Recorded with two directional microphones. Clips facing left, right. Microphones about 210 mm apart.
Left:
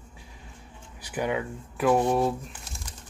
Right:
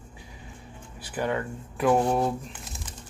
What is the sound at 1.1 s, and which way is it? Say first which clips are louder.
Speech: even; 10° left (ahead or behind).